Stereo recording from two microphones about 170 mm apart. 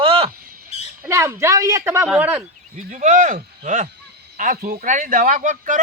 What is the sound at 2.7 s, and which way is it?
Speech, 45° right (ahead or behind).